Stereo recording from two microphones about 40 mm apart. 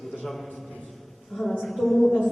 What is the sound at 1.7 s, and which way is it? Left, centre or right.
Speech, centre.